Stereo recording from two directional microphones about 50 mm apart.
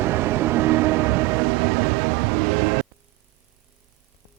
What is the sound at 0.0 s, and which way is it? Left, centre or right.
Train, right.